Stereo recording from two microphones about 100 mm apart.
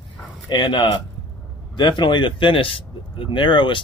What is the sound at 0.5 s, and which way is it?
Speech, 50° left (ahead or behind).